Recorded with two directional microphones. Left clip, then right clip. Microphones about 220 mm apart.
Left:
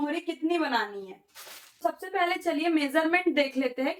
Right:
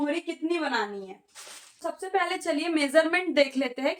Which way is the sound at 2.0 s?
35° right (ahead or behind).